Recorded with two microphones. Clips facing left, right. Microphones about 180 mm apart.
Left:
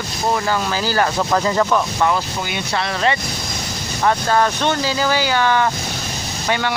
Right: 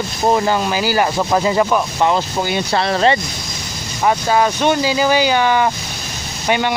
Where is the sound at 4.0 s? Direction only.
10° right (ahead or behind).